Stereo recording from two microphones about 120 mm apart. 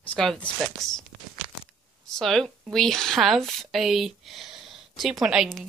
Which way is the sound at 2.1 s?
Centre (ahead or behind).